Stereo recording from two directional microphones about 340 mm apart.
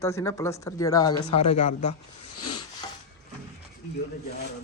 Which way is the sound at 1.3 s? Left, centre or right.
Left.